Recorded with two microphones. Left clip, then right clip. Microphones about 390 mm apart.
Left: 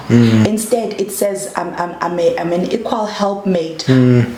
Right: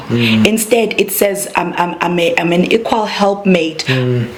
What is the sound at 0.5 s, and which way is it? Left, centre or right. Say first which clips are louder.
A woman's voice: right 4 dB; right.